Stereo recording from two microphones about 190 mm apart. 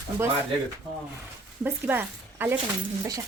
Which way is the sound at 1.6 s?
10° right (ahead or behind).